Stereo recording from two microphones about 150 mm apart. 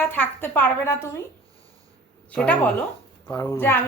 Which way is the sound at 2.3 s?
10° left (ahead or behind).